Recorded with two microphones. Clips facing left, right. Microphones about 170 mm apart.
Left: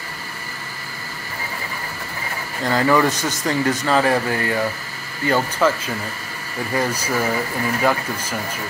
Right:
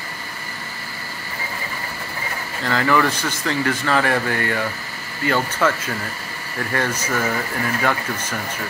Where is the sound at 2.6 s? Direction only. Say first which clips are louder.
Left 2 dB; 20° left (ahead or behind).